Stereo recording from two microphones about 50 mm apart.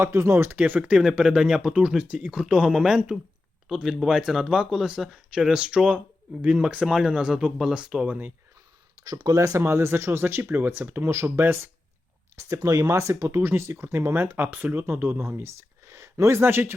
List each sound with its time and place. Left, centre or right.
0.0 s speech: right
0.5 s speech: right
0.8 s speech: centre
2.0 s speech: right
2.3 s speech: centre
8.0 s speech: right
9.0 s speech: right
12.4 s speech: right
14.3 s speech: right
15.2 s speech: right
16.4 s speech: right